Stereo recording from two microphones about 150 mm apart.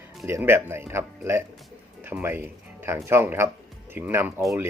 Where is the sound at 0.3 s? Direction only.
15° right (ahead or behind).